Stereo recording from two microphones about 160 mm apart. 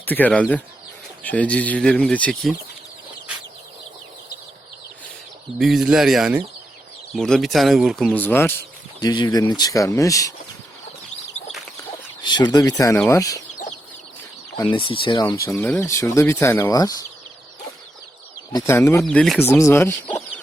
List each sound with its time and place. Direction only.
0.0 s speech: 10° left (ahead or behind)
5.5 s speech: centre (ahead or behind)
9.0 s speech: 25° left (ahead or behind)
12.2 s speech: 25° left (ahead or behind)
14.6 s speech: 30° left (ahead or behind)
15.4 s speech: 15° left (ahead or behind)
18.5 s speech: 15° left (ahead or behind)